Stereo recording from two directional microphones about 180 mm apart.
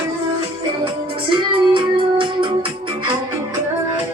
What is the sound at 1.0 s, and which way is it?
Music, 30° right (ahead or behind).